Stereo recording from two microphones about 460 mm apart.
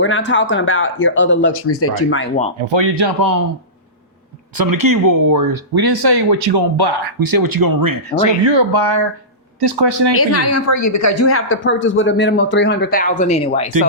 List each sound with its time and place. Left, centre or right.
0.0 s a woman's voice: left
2.6 s a man's voice: right
4.5 s speech: right
8.4 s a man's voice: right
10.2 s a woman's voice: left; by 13.7 s centre